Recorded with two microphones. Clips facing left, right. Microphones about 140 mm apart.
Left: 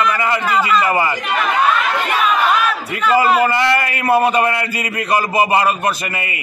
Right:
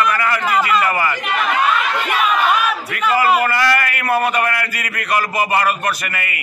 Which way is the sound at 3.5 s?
25° left (ahead or behind).